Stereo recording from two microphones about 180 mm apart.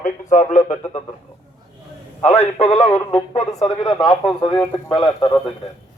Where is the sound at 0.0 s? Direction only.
45° left (ahead or behind).